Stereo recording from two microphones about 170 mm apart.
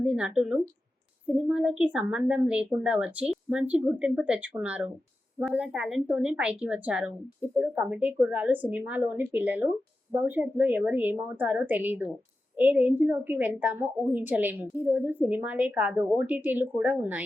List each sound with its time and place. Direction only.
0.0 s a woman's voice: 5° right (ahead or behind)